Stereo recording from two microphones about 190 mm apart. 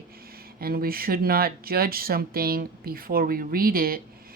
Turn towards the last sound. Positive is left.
turn(degrees=-50)  # may be behind; listen again after turning